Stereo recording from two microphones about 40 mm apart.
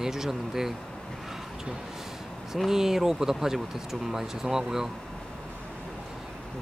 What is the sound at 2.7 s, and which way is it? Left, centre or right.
Speech, centre.